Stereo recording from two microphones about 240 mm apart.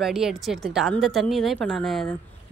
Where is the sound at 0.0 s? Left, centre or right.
Centre.